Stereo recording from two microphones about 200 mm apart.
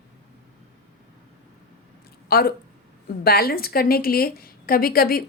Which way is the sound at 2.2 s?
50° left (ahead or behind).